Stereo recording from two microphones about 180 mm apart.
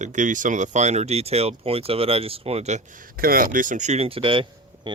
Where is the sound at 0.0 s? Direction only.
45° right (ahead or behind).